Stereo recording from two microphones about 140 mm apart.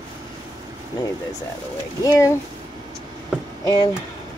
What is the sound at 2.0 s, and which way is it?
Speech, 25° left (ahead or behind).